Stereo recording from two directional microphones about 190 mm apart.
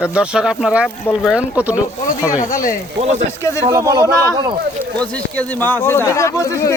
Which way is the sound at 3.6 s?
20° right (ahead or behind).